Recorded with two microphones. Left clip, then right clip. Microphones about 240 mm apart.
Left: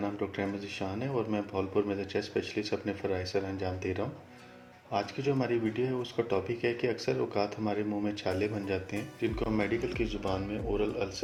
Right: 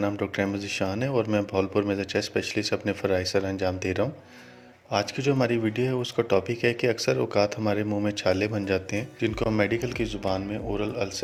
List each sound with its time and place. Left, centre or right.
0.0 s speech: right